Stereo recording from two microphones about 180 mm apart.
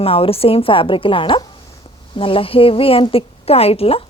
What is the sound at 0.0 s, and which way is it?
A woman's voice, 30° left (ahead or behind).